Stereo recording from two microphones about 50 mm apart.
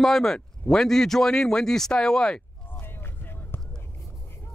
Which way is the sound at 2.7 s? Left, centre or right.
Left.